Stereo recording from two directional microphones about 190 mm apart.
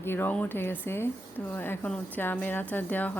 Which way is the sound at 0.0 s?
10° left (ahead or behind).